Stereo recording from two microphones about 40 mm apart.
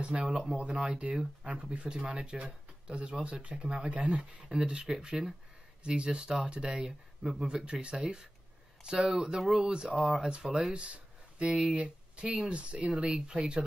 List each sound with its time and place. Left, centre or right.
0.0 s speech: right
4.2 s speech: centre
9.9 s speech: centre
10.4 s speech: centre